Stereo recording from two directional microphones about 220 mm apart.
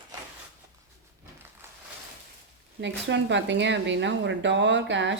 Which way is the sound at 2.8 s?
55° right (ahead or behind).